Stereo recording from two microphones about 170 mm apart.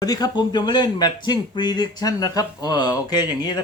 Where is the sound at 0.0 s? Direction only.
25° left (ahead or behind).